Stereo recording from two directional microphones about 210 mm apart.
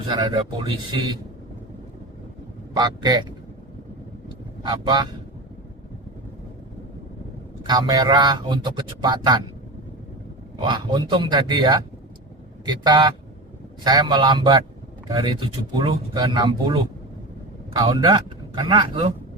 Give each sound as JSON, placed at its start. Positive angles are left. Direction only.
{"t": 0.1, "sound": "a man's voice", "side_deg": -20}
{"t": 2.7, "sound": "a man's voice", "side_deg": -20}
{"t": 4.6, "sound": "a man's voice", "side_deg": -20}
{"t": 7.7, "sound": "a man's voice", "side_deg": -20}
{"t": 10.6, "sound": "a man's voice", "side_deg": -20}